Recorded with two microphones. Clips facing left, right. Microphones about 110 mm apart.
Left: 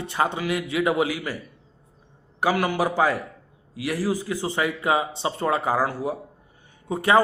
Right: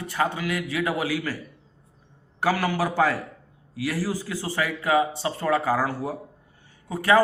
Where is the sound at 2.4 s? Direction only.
15° left (ahead or behind).